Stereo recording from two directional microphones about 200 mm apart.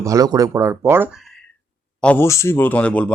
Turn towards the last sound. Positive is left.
turn(degrees=5)  # may be behind; listen again after turning